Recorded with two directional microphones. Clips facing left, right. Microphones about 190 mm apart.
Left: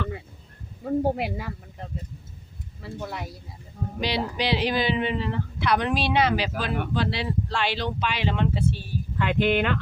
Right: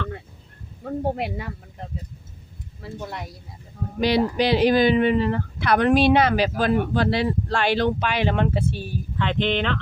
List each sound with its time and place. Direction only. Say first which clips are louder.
0.9 s speech: left 1 dB; centre (ahead or behind)
2.8 s speech: right 1 dB; centre (ahead or behind)
4.4 s speech: right 6 dB; 45° right (ahead or behind)
9.1 s speech: left 1 dB; 10° left (ahead or behind)